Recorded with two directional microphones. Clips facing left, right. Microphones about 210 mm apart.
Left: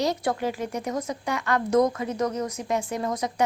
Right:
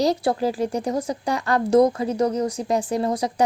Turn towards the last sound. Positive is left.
turn(degrees=-35)  # may be behind; listen again after turning